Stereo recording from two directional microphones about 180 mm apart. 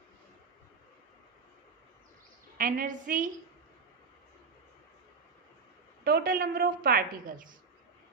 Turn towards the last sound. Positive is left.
turn(degrees=-50)  # may be behind; listen again after turning